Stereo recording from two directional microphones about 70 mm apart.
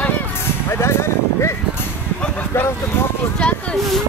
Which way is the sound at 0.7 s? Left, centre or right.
Left.